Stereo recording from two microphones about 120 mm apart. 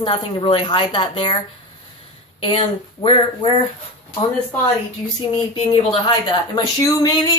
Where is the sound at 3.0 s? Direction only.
45° left (ahead or behind).